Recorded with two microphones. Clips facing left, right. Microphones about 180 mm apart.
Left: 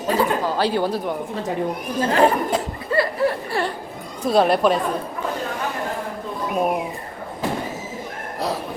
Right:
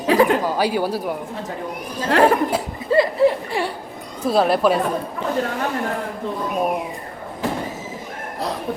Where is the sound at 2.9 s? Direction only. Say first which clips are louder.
Right 5 dB; 20° right (ahead or behind).